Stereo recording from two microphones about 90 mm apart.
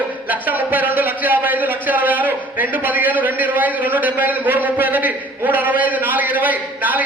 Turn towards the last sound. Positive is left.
turn(degrees=-20)  # may be behind; listen again after turning